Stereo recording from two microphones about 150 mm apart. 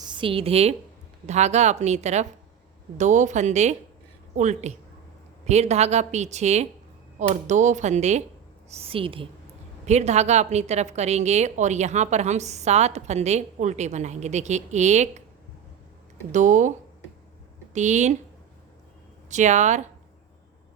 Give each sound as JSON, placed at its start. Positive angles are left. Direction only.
{"t": 0.0, "sound": "a woman's voice", "side_deg": -30}
{"t": 8.7, "sound": "a woman's voice", "side_deg": -40}
{"t": 9.8, "sound": "a woman's voice", "side_deg": -50}
{"t": 16.3, "sound": "speech", "side_deg": -55}
{"t": 17.7, "sound": "a woman's voice", "side_deg": -50}
{"t": 19.3, "sound": "a woman's voice", "side_deg": -50}